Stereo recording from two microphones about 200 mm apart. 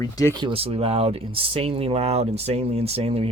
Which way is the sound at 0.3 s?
25° right (ahead or behind).